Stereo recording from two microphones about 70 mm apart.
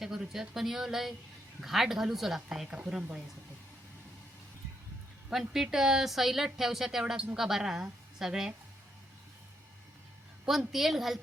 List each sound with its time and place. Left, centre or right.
0.0 s a woman's voice: centre
5.3 s a woman's voice: centre
10.7 s a woman's voice: centre